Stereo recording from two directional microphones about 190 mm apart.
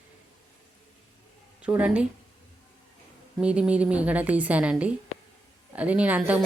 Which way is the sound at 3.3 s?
5° right (ahead or behind).